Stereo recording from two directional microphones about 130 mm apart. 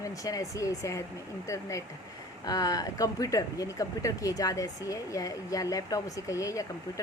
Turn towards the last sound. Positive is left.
turn(degrees=25)  # may be behind; listen again after turning